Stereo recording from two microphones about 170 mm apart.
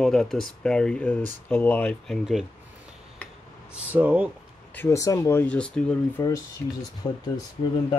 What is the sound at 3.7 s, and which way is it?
Speech, 10° right (ahead or behind).